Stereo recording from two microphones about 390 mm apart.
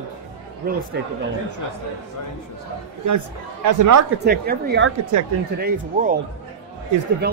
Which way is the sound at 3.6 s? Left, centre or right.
Right.